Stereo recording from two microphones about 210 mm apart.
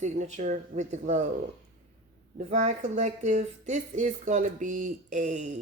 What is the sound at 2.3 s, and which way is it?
Speech, 35° right (ahead or behind).